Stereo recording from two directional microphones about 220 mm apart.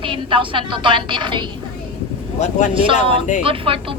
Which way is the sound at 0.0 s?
20° right (ahead or behind).